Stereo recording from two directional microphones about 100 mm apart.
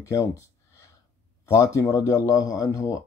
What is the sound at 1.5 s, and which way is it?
Speech, 30° left (ahead or behind).